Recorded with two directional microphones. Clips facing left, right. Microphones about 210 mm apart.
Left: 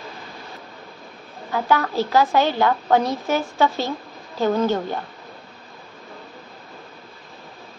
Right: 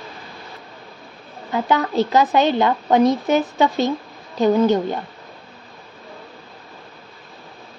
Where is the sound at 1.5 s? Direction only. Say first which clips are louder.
Right 1 dB; 20° right (ahead or behind).